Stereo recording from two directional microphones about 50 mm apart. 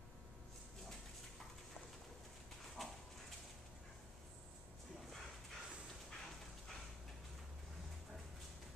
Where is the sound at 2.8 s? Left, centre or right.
Centre.